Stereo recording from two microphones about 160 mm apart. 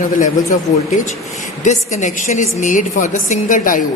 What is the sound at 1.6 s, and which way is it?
A woman's voice, 50° left (ahead or behind).